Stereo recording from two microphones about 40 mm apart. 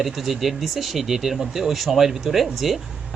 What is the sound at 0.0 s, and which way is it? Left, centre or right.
Speech, centre.